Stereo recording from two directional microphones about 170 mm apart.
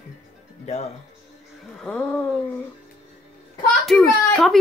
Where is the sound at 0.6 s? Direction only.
40° left (ahead or behind).